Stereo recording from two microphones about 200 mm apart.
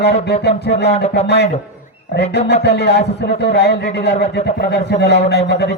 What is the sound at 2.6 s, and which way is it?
Speech, 55° left (ahead or behind).